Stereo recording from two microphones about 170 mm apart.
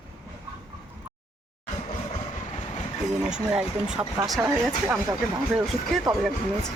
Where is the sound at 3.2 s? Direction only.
5° right (ahead or behind).